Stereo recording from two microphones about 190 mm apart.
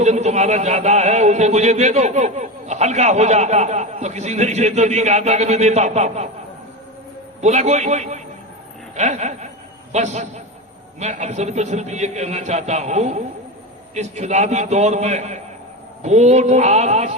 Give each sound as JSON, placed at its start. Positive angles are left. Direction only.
{"t": 0.0, "sound": "a man's voice", "side_deg": -35}
{"t": 7.4, "sound": "a man's voice", "side_deg": -35}
{"t": 9.0, "sound": "a sound", "side_deg": -35}
{"t": 9.9, "sound": "a man's voice", "side_deg": -35}